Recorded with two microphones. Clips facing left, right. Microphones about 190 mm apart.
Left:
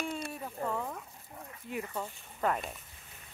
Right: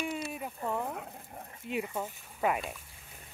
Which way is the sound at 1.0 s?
60° right (ahead or behind).